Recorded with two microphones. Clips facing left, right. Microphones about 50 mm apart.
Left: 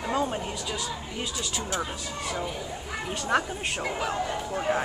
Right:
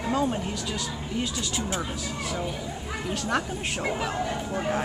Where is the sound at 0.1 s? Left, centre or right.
Centre.